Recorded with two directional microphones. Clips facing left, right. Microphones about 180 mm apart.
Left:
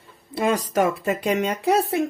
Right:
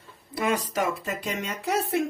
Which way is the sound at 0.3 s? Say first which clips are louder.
Left 4 dB; 30° left (ahead or behind).